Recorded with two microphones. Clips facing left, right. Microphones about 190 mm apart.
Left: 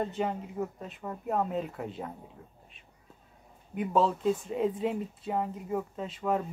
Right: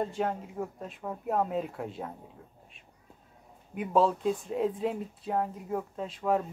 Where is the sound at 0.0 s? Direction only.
Centre (ahead or behind).